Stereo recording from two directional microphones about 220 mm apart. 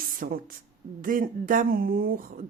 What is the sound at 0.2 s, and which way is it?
Speech, 40° right (ahead or behind).